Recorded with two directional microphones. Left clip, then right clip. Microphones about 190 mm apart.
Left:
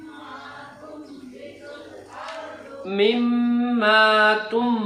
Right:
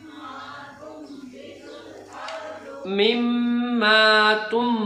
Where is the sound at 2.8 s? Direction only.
15° right (ahead or behind).